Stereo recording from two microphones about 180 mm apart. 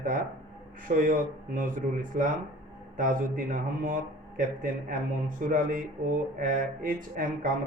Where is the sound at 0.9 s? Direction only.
50° right (ahead or behind).